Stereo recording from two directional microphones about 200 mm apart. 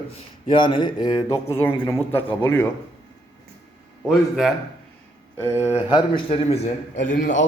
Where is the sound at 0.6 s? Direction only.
25° left (ahead or behind).